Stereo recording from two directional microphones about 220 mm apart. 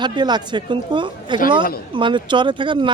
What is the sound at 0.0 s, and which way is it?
Speech, 20° right (ahead or behind).